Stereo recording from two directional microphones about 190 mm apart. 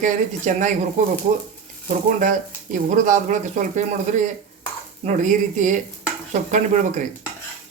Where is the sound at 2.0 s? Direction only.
40° right (ahead or behind).